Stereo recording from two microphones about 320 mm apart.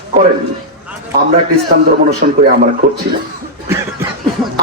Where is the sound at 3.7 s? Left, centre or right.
Centre.